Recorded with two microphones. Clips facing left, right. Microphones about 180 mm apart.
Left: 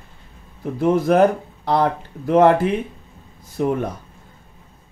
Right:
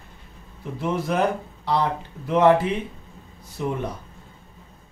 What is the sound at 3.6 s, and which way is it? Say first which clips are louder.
Speech: left 7 dB; 50° left (ahead or behind).